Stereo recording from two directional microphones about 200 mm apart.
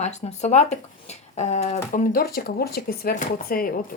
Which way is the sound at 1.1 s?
35° left (ahead or behind).